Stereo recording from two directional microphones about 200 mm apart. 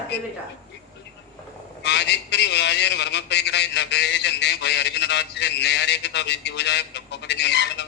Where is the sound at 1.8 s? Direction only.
60° left (ahead or behind).